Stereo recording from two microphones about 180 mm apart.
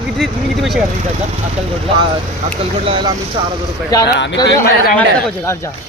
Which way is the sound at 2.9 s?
25° right (ahead or behind).